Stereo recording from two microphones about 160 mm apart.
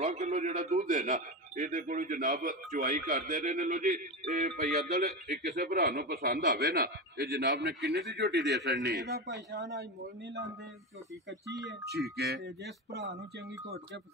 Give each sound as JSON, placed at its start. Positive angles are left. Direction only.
{"t": 0.0, "sound": "a man's voice", "side_deg": -45}
{"t": 5.0, "sound": "a man's voice", "side_deg": -70}
{"t": 12.4, "sound": "a man's voice", "side_deg": -90}